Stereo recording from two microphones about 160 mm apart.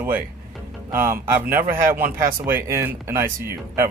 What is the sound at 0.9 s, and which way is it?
Speech, 15° right (ahead or behind).